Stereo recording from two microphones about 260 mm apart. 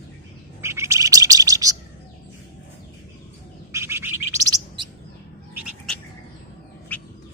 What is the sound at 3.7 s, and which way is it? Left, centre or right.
Bird, centre.